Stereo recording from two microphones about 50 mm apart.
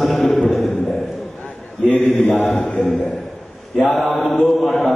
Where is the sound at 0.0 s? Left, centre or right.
Centre.